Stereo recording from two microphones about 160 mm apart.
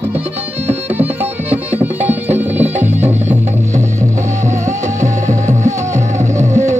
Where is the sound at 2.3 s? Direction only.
10° right (ahead or behind).